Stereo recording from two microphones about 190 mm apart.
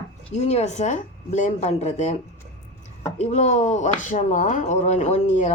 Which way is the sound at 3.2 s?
35° left (ahead or behind).